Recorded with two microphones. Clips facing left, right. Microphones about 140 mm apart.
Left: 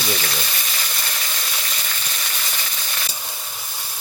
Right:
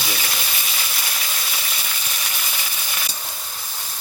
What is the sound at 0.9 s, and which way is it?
Sizzle, 5° right (ahead or behind).